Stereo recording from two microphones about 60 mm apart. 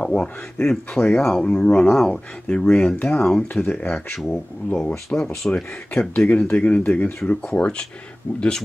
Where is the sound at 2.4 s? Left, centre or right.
Centre.